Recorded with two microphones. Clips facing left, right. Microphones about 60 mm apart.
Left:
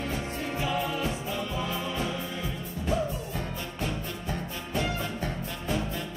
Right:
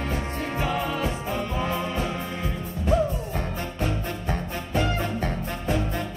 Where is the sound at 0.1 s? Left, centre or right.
Right.